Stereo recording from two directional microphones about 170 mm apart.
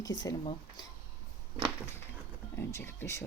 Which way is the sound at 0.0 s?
20° left (ahead or behind).